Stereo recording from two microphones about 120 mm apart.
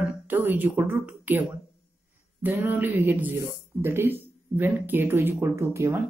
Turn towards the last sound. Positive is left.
turn(degrees=-20)  # may be behind; listen again after turning